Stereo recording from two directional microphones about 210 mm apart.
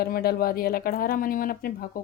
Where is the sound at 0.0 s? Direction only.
45° left (ahead or behind).